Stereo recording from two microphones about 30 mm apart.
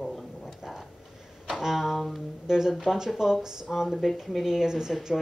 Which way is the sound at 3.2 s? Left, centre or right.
Centre.